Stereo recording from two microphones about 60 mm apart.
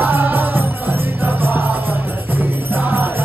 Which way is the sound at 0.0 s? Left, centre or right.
Right.